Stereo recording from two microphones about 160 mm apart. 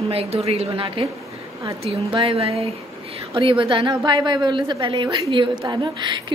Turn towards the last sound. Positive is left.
turn(degrees=-30)  # may be behind; listen again after turning